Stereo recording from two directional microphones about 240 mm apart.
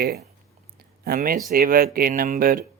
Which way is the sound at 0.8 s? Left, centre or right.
Right.